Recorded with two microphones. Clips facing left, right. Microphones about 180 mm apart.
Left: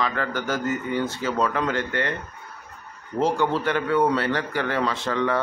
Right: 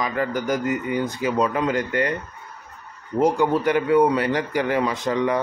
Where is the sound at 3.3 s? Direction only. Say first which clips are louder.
Right 4 dB; 10° right (ahead or behind).